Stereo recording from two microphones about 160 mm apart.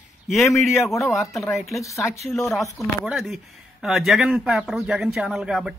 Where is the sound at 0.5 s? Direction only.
Centre (ahead or behind).